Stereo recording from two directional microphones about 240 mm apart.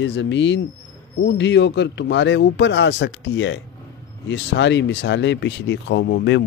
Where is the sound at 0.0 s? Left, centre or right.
Left.